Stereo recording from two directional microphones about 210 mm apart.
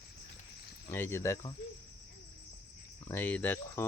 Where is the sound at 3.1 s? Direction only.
10° left (ahead or behind).